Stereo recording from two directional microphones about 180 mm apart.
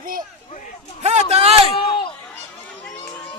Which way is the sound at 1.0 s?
35° right (ahead or behind).